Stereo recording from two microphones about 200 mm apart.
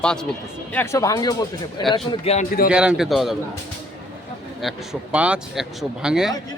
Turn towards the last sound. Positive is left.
turn(degrees=-5)  # may be behind; listen again after turning